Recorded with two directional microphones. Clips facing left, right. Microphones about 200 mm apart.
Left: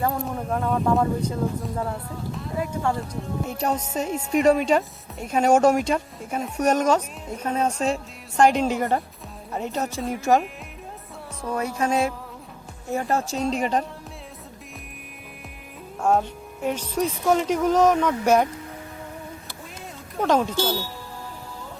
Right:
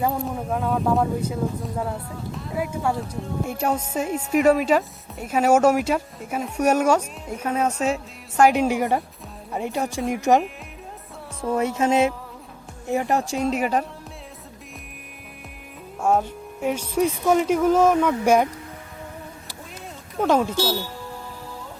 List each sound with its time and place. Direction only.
0.0 s speech: 10° right (ahead or behind)
11.4 s speech: 25° right (ahead or behind); by 13.8 s 5° right (ahead or behind)
16.0 s speech: 5° right (ahead or behind)
20.2 s speech: 10° right (ahead or behind)